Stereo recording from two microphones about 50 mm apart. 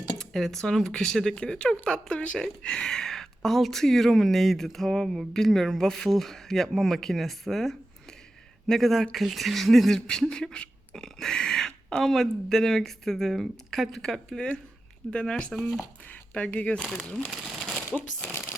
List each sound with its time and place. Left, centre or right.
0.2 s speech: centre
10.2 s speech: centre
16.8 s speech: centre
17.3 s crumpling: centre
17.9 s shuffling cards: left